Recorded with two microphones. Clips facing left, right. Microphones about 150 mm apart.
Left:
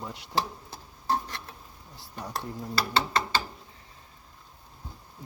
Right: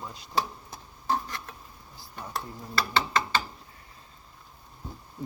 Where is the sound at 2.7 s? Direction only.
35° left (ahead or behind).